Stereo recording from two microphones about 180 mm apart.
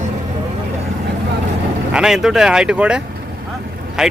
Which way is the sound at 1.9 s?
5° right (ahead or behind).